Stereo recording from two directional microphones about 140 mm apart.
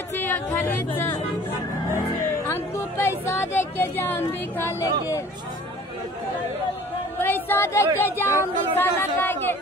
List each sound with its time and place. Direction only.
0.2 s speech: 15° left (ahead or behind)
2.4 s a sound: 20° left (ahead or behind)
4.6 s speech: 20° left (ahead or behind)
7.2 s speech: 15° left (ahead or behind)